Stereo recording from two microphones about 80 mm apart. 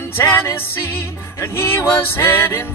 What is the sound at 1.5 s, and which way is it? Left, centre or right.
Music, left.